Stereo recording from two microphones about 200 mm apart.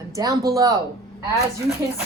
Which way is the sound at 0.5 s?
15° right (ahead or behind).